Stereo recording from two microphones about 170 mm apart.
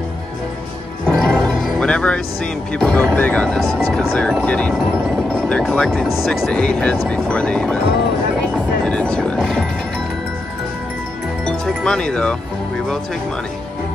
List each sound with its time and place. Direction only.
1.0 s speech: 5° left (ahead or behind)
8.8 s speech: 5° left (ahead or behind)
11.4 s music: 5° left (ahead or behind)